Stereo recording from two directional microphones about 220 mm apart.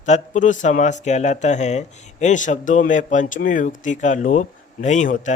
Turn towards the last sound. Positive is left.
turn(degrees=35)  # may be behind; listen again after turning